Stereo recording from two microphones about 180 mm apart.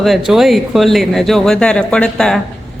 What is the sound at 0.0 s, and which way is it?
Speech, centre (ahead or behind).